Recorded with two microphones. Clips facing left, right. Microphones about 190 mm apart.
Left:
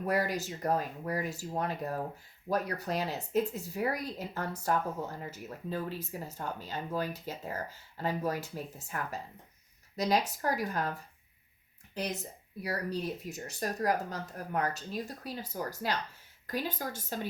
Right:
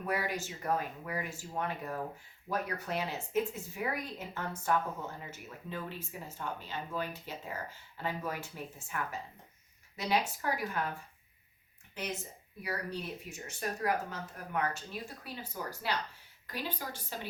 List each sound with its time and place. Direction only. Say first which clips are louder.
0.0 s speech: left 4 dB; 40° left (ahead or behind)